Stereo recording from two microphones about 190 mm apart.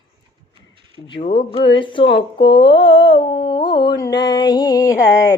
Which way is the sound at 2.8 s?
75° left (ahead or behind).